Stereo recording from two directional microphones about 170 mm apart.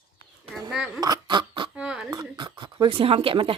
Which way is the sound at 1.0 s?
25° right (ahead or behind).